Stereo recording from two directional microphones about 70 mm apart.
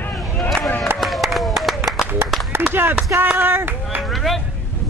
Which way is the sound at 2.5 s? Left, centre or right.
Right.